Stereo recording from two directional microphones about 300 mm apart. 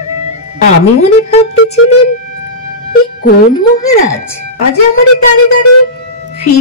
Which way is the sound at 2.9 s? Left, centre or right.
Left.